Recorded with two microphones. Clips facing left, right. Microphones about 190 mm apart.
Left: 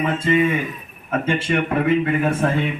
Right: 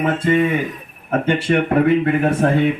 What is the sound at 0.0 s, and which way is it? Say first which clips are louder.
Speech: right 2 dB; 55° right (ahead or behind).